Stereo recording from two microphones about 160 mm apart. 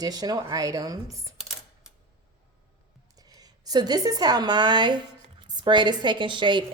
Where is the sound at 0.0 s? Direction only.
25° right (ahead or behind).